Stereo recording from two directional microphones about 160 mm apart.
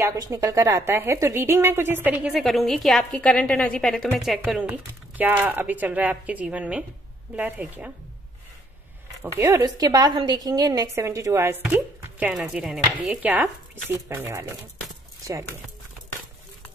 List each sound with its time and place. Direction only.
0.0 s a woman's voice: 20° right (ahead or behind)
9.2 s a woman's voice: 20° right (ahead or behind)